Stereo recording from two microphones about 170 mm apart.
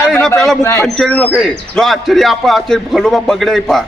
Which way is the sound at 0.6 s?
15° left (ahead or behind).